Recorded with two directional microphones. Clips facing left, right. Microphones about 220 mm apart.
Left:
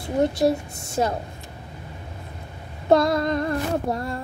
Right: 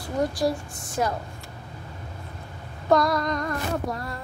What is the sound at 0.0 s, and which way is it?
A woman's voice, 25° left (ahead or behind).